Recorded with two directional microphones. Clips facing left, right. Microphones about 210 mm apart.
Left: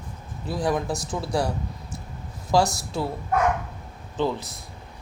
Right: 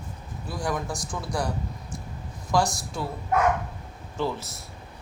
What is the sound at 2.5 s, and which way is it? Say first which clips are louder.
Speech: left 3 dB; 30° left (ahead or behind).